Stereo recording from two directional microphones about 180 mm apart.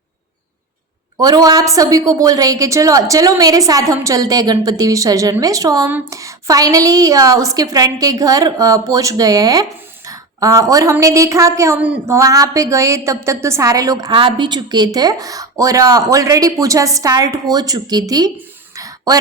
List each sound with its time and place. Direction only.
1.2 s a woman's voice: 20° right (ahead or behind)
18.8 s throat clearing: 20° right (ahead or behind)